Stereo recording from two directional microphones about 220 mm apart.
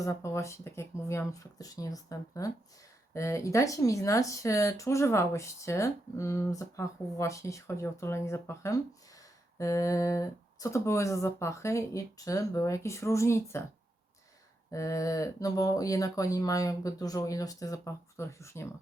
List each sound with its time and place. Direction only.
0.0 s speech: 15° left (ahead or behind)
14.7 s speech: 15° left (ahead or behind)